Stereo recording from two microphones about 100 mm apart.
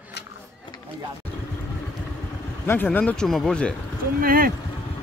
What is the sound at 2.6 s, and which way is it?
Speech, 20° left (ahead or behind).